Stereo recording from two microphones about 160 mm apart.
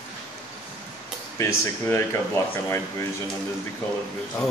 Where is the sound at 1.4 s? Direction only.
15° left (ahead or behind).